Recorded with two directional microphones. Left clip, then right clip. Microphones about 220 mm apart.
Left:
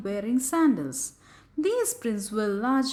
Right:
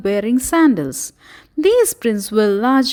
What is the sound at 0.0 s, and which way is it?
A woman's voice, 35° right (ahead or behind).